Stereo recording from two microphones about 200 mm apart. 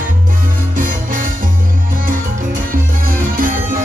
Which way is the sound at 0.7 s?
40° right (ahead or behind).